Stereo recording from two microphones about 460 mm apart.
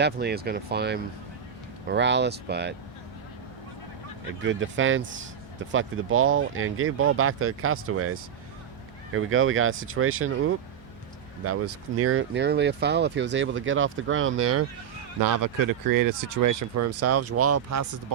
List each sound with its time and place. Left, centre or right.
0.0 s speech: right
4.4 s speech: right
15.2 s speech: right